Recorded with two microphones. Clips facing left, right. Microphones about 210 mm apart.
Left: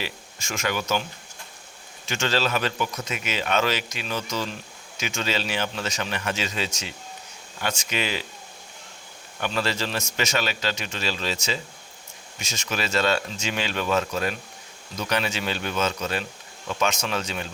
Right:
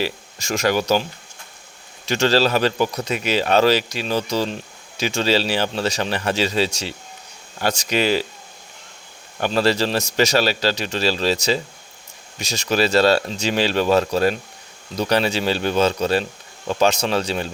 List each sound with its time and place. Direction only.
0.0 s a man's voice: 35° right (ahead or behind)
2.0 s a man's voice: 35° right (ahead or behind)
9.4 s a man's voice: 35° right (ahead or behind)